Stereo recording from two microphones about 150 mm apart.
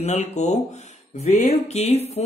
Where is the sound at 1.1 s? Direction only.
50° left (ahead or behind).